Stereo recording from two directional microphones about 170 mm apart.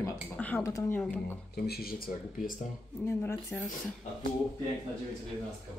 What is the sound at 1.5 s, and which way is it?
Speech, 70° left (ahead or behind).